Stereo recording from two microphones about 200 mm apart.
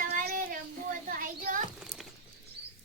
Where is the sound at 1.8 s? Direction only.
Centre (ahead or behind).